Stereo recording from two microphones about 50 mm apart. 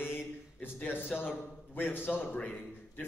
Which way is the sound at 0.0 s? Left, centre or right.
Left.